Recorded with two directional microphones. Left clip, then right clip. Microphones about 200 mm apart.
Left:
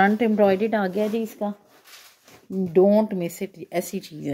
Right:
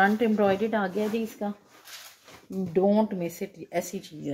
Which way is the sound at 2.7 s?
40° left (ahead or behind).